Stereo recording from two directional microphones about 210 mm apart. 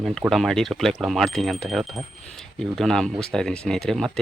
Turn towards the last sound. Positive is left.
turn(degrees=0)  # may be behind; listen again after turning